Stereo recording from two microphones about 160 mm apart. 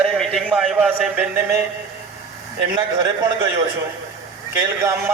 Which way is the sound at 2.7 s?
25° right (ahead or behind).